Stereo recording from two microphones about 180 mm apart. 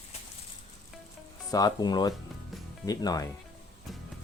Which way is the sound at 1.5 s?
20° left (ahead or behind).